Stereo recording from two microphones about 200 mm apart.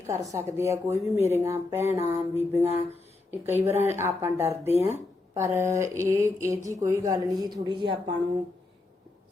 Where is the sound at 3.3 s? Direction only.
10° right (ahead or behind).